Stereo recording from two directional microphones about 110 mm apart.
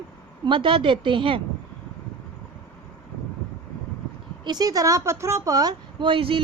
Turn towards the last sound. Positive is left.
turn(degrees=-55)  # may be behind; listen again after turning